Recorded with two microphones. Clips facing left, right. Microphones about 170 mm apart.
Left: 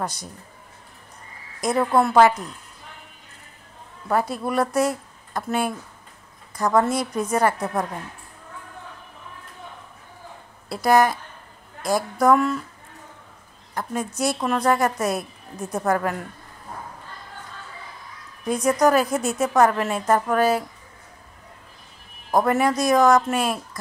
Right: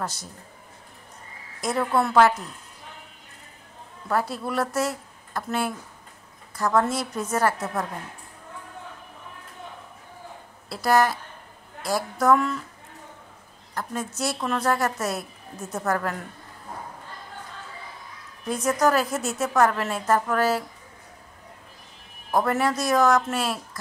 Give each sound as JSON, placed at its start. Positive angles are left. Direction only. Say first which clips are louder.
{"t": 0.0, "sound": "a woman's voice", "louder": "left 3 dB", "side_deg": 15}
{"t": 1.6, "sound": "a woman's voice", "louder": "left 4 dB", "side_deg": 20}
{"t": 4.1, "sound": "a woman's voice", "louder": "left 3 dB", "side_deg": 15}
{"t": 10.7, "sound": "a woman's voice", "louder": "left 3 dB", "side_deg": 15}
{"t": 13.7, "sound": "a woman's voice", "louder": "left 4 dB", "side_deg": 15}
{"t": 18.5, "sound": "a woman's voice", "louder": "left 4 dB", "side_deg": 15}
{"t": 22.3, "sound": "a woman's voice", "louder": "left 3 dB", "side_deg": 15}